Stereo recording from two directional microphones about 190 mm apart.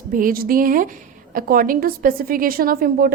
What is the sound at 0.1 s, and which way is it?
A woman's voice, 45° right (ahead or behind).